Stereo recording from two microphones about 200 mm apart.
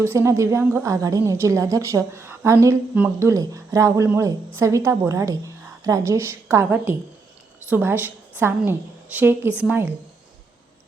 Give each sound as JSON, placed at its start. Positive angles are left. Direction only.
{"t": 0.0, "sound": "a woman's voice", "side_deg": -15}